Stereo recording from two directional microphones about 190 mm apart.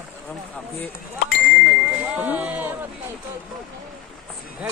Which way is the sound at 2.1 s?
5° right (ahead or behind).